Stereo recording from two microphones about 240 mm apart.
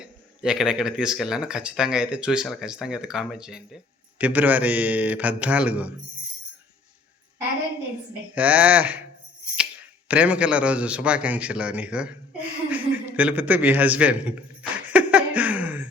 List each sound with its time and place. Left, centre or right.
0.0 s speech: centre
8.4 s speech: centre
10.1 s speech: centre
12.7 s a sound: centre